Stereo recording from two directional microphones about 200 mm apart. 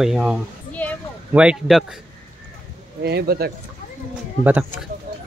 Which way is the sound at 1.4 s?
5° right (ahead or behind).